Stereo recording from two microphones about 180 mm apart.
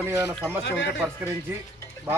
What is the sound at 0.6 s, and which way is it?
Speech, 75° left (ahead or behind).